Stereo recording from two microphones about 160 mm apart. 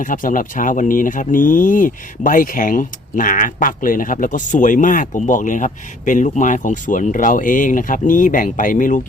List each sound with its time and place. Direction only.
0.0 s speech: 55° left (ahead or behind)